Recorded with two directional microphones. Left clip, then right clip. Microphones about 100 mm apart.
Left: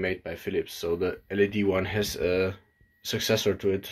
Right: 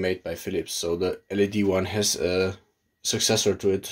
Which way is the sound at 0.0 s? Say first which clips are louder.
Right 3 dB; 35° right (ahead or behind).